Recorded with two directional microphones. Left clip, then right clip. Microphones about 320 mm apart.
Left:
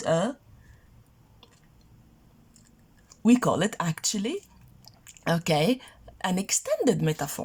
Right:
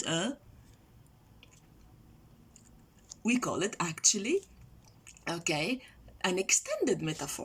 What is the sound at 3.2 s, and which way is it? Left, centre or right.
Speech, left.